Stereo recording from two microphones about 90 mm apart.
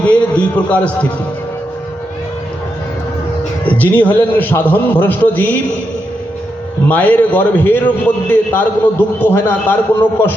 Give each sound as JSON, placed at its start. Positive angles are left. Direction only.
{"t": 0.0, "sound": "a sound", "side_deg": 15}
{"t": 3.7, "sound": "a man's voice", "side_deg": 20}
{"t": 6.8, "sound": "a man's voice", "side_deg": 20}